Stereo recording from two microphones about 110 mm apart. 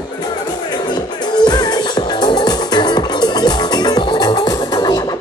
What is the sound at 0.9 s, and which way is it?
Music, 40° left (ahead or behind).